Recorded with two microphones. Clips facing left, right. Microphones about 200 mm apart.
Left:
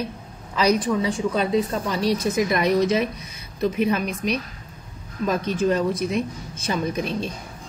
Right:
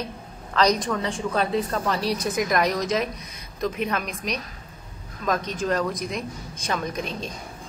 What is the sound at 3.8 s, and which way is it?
Speech, 5° left (ahead or behind).